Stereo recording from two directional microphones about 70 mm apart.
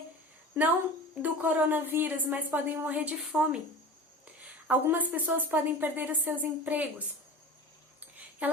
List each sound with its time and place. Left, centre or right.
1.2 s a woman's voice: right
4.7 s a woman's voice: right
8.4 s a sound: centre